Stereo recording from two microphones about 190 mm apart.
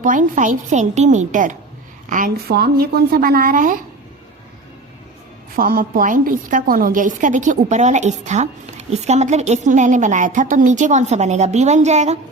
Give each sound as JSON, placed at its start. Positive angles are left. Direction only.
{"t": 0.0, "sound": "a woman's voice", "side_deg": -45}
{"t": 5.5, "sound": "a woman's voice", "side_deg": -50}